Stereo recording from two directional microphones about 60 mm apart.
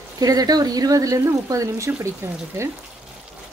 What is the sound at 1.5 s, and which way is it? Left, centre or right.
Speech, right.